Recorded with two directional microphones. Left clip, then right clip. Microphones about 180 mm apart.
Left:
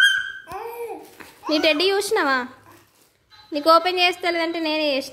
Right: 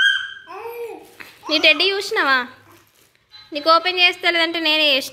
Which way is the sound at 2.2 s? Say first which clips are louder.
Right 4 dB; 15° left (ahead or behind).